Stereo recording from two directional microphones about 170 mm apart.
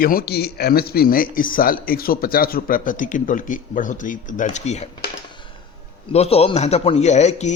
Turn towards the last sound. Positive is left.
turn(degrees=40)  # may be behind; listen again after turning